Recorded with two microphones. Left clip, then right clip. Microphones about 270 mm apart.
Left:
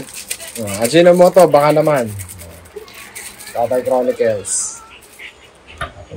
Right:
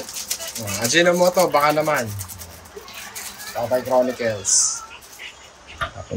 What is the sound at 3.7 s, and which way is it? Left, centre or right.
Speech, centre.